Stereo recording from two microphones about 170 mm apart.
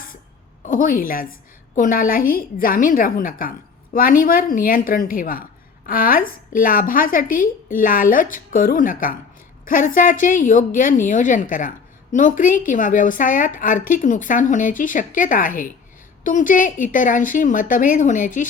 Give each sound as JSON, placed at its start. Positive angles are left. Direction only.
{"t": 0.6, "sound": "a woman's voice", "side_deg": 55}